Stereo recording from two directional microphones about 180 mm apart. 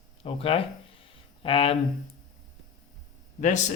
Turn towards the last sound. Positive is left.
turn(degrees=45)  # may be behind; listen again after turning